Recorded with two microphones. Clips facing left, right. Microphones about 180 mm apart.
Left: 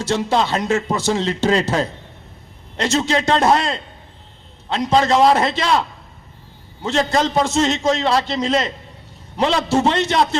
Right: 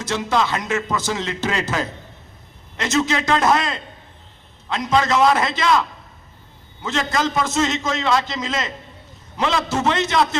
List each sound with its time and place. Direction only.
0.0 s a man's voice: 30° left (ahead or behind)
6.8 s a man's voice: 30° left (ahead or behind)